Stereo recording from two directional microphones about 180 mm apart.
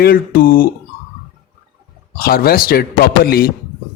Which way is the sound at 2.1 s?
55° left (ahead or behind).